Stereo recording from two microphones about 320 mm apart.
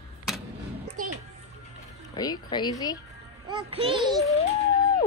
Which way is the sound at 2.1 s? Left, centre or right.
Centre.